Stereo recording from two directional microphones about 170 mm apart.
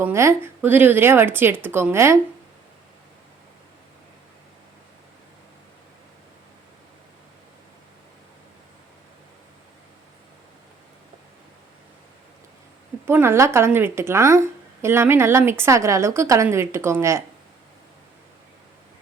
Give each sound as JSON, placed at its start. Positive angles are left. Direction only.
{"t": 0.0, "sound": "a woman's voice", "side_deg": -15}
{"t": 13.1, "sound": "a woman's voice", "side_deg": -15}